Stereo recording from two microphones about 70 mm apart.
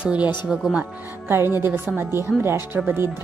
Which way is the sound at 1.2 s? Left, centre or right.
Right.